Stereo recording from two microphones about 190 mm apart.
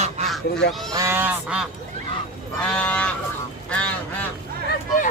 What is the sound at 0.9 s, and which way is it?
Goose, 15° right (ahead or behind).